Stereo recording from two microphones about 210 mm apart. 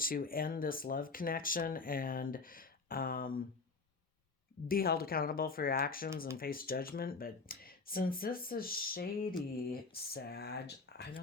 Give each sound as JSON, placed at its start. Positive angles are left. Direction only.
{"t": 0.0, "sound": "speech", "side_deg": 45}
{"t": 4.7, "sound": "speech", "side_deg": 45}